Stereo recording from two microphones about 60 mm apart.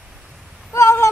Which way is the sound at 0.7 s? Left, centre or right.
Left.